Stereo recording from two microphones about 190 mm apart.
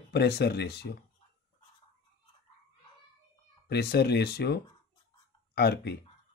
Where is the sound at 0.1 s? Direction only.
55° left (ahead or behind).